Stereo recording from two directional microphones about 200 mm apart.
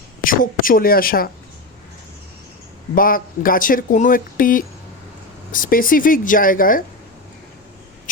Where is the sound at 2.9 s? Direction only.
45° left (ahead or behind).